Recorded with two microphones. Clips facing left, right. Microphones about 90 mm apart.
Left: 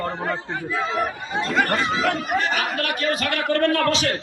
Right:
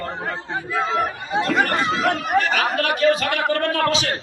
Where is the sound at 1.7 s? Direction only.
55° right (ahead or behind); by 2.9 s 40° right (ahead or behind).